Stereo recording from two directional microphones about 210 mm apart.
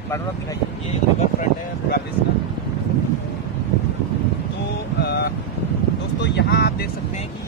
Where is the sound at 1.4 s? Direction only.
50° left (ahead or behind).